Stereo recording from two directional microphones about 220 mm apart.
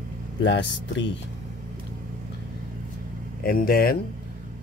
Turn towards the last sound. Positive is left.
turn(degrees=40)  # may be behind; listen again after turning